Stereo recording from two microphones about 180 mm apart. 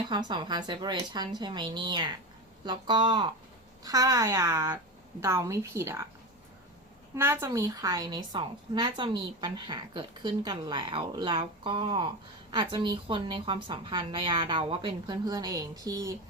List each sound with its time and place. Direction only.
0.0 s a woman's voice: 25° right (ahead or behind)
7.2 s a woman's voice: 10° right (ahead or behind)